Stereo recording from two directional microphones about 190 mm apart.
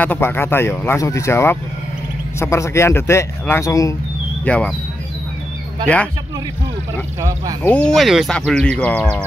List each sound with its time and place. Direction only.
0.0 s speech: 10° left (ahead or behind)
4.5 s speech: 5° left (ahead or behind)
7.2 s speech: 15° right (ahead or behind)
7.6 s speech: 5° left (ahead or behind)